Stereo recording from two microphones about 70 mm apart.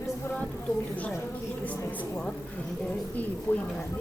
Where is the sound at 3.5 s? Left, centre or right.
Left.